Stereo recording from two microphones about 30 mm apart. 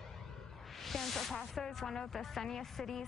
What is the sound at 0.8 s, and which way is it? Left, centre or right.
A woman's voice, centre.